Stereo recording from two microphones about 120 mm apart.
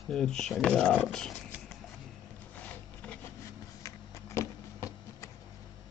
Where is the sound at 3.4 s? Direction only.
25° left (ahead or behind).